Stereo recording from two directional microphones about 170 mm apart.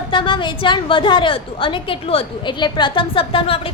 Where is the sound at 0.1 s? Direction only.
30° left (ahead or behind).